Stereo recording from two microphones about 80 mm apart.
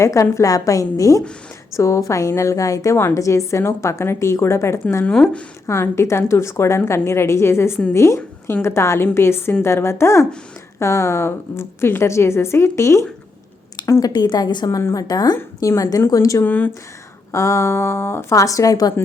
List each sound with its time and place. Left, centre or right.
0.0 s a woman's voice: left
5.0 s speech: centre
5.6 s a woman's voice: left
14.0 s a woman's voice: left
14.8 s a woman's voice: left
15.0 s a woman's voice: left
15.6 s a woman's voice: left
16.4 s speech: left
17.3 s a woman's voice: left